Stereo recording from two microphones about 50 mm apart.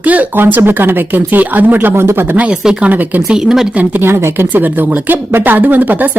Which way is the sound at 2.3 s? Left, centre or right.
Right.